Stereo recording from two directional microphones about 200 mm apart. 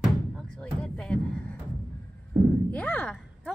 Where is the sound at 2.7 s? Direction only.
5° left (ahead or behind).